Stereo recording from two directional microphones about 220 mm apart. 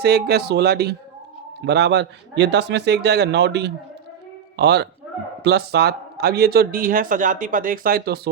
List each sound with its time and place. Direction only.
0.0 s speech: 45° right (ahead or behind)